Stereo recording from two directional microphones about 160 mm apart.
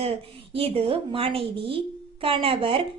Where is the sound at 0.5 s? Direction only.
35° right (ahead or behind).